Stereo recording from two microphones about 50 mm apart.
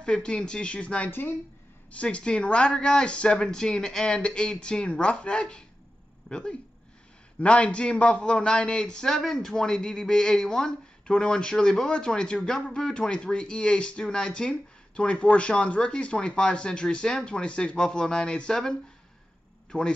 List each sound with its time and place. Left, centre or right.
0.0 s a man's voice: centre